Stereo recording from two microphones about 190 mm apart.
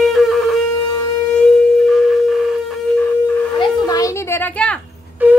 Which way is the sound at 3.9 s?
20° left (ahead or behind).